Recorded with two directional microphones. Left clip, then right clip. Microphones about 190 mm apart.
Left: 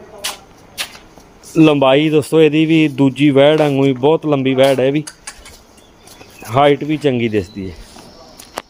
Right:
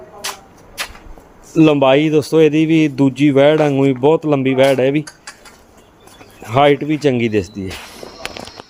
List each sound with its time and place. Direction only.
0.8 s a sound: 15° right (ahead or behind)
1.5 s speech: 5° left (ahead or behind)
6.4 s speech: centre (ahead or behind)